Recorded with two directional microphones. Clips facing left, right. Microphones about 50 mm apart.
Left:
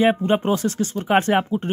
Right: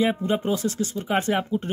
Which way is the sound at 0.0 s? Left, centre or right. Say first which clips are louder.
Left 5 dB; left.